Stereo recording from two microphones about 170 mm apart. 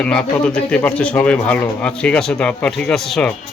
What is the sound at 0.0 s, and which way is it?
Speech, 5° left (ahead or behind).